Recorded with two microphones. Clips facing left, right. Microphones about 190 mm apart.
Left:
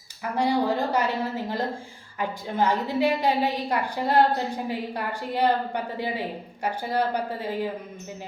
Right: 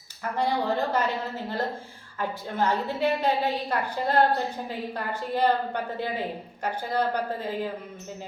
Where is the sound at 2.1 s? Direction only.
10° left (ahead or behind).